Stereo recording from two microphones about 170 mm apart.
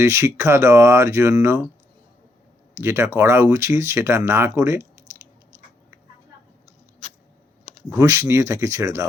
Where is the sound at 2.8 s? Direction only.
15° right (ahead or behind).